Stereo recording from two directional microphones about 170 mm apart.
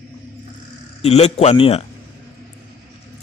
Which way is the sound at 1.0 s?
40° left (ahead or behind).